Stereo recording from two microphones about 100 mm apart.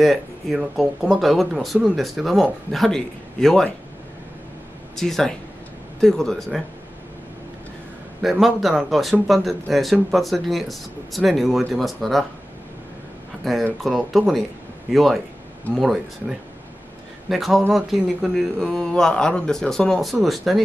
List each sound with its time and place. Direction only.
0.0 s speech: centre (ahead or behind)
4.9 s speech: 5° left (ahead or behind)
8.2 s speech: 5° right (ahead or behind)
13.4 s speech: centre (ahead or behind)